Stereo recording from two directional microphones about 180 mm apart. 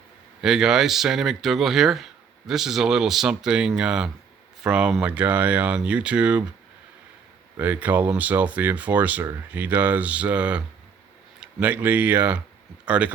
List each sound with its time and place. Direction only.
0.4 s speech: 5° right (ahead or behind)
7.5 s speech: 10° right (ahead or behind)